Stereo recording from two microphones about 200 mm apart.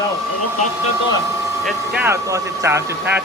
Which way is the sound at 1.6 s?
5° right (ahead or behind).